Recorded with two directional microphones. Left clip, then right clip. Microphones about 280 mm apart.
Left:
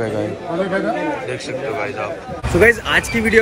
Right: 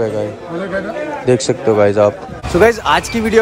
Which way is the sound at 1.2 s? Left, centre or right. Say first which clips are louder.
Right 10 dB; right.